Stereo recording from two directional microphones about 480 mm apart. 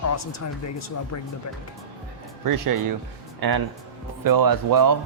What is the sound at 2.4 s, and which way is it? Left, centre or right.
Speech, right.